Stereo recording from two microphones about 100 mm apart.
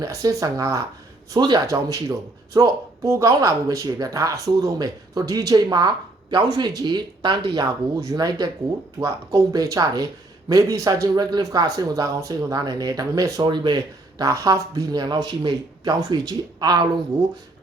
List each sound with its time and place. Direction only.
0.0 s speech: 35° right (ahead or behind)
1.3 s speech: 45° right (ahead or behind)
1.6 s speech: 30° right (ahead or behind)
7.5 s speech: 35° right (ahead or behind)
13.4 s speech: 50° right (ahead or behind)
14.2 s speech: 35° right (ahead or behind)